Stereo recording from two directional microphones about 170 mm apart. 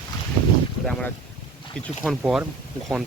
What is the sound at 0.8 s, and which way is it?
Speech, 5° left (ahead or behind).